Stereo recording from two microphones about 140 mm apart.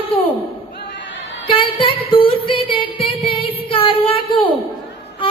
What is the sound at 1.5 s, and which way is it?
Music, 40° left (ahead or behind).